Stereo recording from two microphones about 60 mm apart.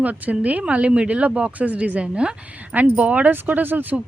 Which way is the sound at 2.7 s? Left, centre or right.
Right.